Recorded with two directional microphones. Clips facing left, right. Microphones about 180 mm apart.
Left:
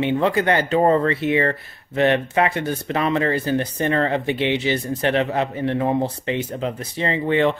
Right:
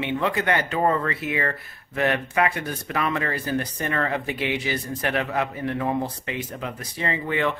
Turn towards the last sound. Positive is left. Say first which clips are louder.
# left 6 dB
turn(degrees=30)  # may be behind; listen again after turning